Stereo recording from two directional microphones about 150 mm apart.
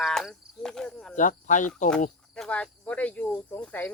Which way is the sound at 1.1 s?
55° left (ahead or behind).